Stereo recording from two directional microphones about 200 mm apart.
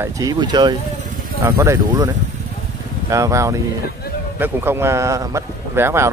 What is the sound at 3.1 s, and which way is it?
Speech, 15° right (ahead or behind).